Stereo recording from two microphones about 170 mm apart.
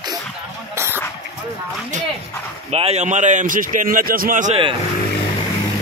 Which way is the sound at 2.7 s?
40° right (ahead or behind).